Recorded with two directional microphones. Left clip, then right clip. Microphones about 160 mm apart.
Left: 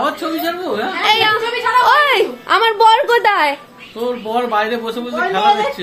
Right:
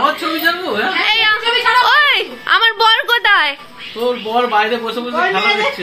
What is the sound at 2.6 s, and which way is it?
Speech, centre (ahead or behind).